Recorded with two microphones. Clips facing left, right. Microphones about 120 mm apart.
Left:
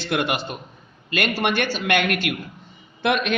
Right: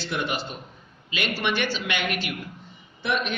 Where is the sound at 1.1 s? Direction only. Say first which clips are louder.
Left 5 dB; 55° left (ahead or behind).